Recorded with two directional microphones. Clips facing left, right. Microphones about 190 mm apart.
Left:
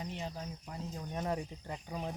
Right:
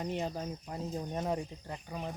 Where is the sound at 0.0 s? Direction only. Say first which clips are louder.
Right 6 dB; 55° right (ahead or behind).